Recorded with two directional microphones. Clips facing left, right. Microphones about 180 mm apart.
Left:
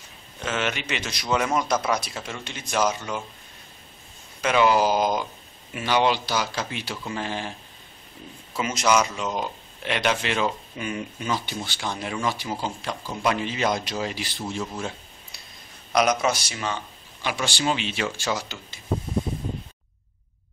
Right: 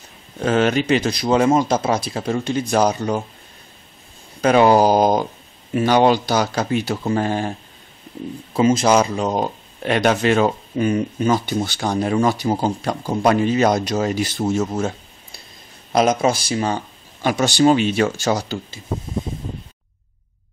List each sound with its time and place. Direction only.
0.4 s speech: 40° right (ahead or behind)
4.4 s speech: 40° right (ahead or behind)
8.5 s speech: 30° right (ahead or behind)
15.9 s speech: 25° right (ahead or behind)